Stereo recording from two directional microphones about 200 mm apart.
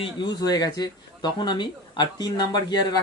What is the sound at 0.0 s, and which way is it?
Speech, 20° left (ahead or behind).